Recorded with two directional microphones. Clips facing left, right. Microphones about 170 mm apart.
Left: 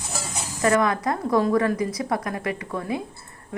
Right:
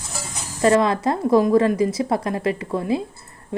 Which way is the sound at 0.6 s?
25° right (ahead or behind).